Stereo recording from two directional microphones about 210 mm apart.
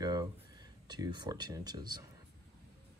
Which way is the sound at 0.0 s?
20° right (ahead or behind).